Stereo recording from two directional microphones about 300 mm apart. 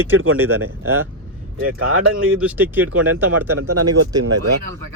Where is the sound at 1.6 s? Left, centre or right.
Right.